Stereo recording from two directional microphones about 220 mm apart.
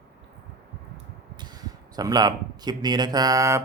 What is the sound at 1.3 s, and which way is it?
Speech, 20° right (ahead or behind).